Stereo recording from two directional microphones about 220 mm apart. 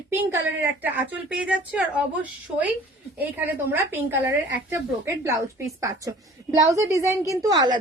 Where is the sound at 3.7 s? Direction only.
10° right (ahead or behind).